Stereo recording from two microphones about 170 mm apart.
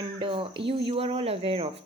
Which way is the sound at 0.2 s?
30° right (ahead or behind).